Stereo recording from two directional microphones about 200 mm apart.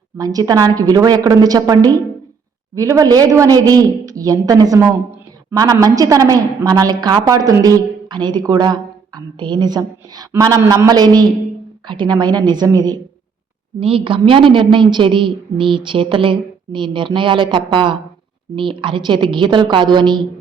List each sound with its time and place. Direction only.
0.2 s a man's voice: 20° right (ahead or behind)